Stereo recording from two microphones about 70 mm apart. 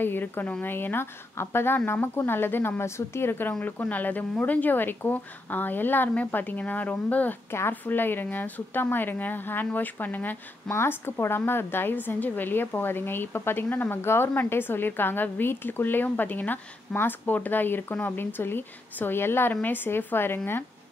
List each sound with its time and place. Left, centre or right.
0.0 s a woman's voice: left